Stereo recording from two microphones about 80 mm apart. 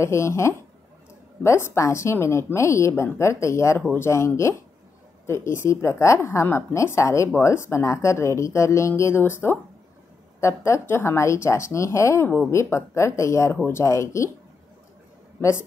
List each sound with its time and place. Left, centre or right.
0.0 s a woman's voice: left